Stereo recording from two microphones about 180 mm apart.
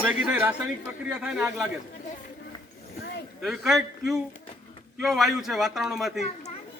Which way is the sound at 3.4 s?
Centre (ahead or behind).